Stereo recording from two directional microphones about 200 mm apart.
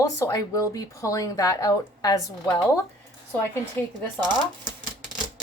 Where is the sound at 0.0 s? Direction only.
15° left (ahead or behind).